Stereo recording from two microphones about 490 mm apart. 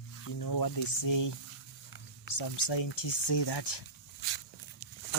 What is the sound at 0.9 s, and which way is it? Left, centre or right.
Speech, left.